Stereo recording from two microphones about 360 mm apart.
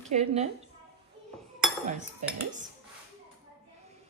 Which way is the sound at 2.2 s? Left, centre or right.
Centre.